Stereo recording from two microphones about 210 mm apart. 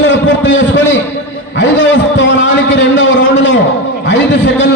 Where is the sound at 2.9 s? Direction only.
60° left (ahead or behind).